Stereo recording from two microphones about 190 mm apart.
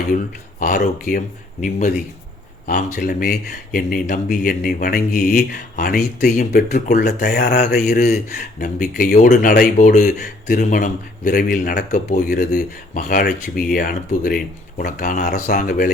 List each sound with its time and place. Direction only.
0.6 s speech: 45° left (ahead or behind)
2.6 s speech: 45° left (ahead or behind)
6.7 s speech: 40° left (ahead or behind)
7.0 s speech: 55° left (ahead or behind)